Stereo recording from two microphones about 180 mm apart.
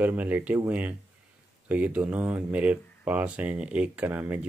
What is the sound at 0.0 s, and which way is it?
Speech, 10° right (ahead or behind).